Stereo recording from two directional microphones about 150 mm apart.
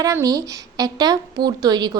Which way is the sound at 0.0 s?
20° right (ahead or behind).